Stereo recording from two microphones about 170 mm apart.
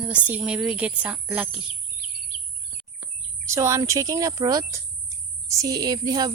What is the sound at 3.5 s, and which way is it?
A woman's voice, 15° right (ahead or behind).